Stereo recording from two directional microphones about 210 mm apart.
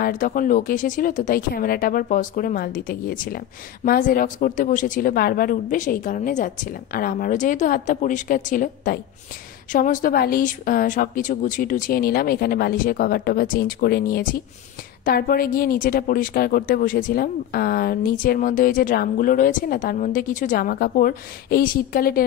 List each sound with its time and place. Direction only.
0.0 s a woman's voice: 40° left (ahead or behind)